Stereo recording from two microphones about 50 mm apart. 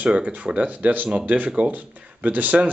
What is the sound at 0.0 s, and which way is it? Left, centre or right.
Speech, right.